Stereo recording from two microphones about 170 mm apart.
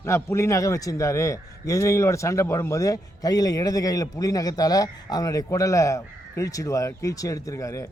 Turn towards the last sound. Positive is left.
turn(degrees=20)  # may be behind; listen again after turning